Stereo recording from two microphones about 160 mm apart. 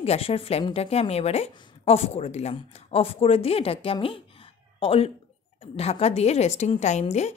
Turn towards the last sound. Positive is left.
turn(degrees=45)  # may be behind; listen again after turning